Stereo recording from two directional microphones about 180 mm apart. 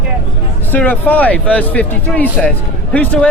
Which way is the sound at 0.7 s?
10° left (ahead or behind).